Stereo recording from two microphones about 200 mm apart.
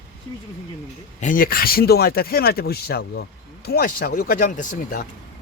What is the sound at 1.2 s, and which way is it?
Speech, 40° left (ahead or behind).